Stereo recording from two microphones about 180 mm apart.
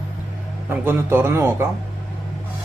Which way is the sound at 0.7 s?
10° right (ahead or behind).